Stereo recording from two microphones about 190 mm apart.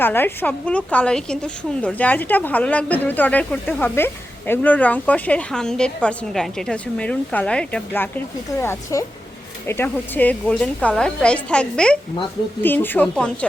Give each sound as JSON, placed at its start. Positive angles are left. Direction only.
{"t": 0.0, "sound": "a woman's voice", "side_deg": 10}